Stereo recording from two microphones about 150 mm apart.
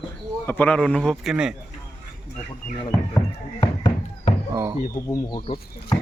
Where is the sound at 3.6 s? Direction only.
30° left (ahead or behind).